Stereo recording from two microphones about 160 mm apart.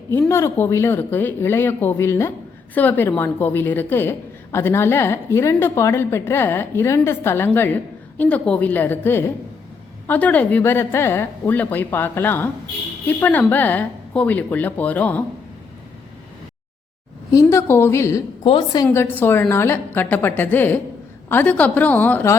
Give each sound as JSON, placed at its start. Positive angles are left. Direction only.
{"t": 0.1, "sound": "a woman's voice", "side_deg": 15}
{"t": 17.3, "sound": "a woman's voice", "side_deg": 15}
{"t": 18.4, "sound": "a woman's voice", "side_deg": 30}
{"t": 18.9, "sound": "a woman's voice", "side_deg": 10}